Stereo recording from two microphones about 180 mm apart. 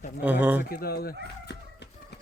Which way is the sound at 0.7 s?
55° left (ahead or behind).